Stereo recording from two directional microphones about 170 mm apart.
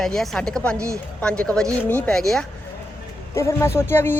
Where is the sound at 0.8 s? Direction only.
15° right (ahead or behind).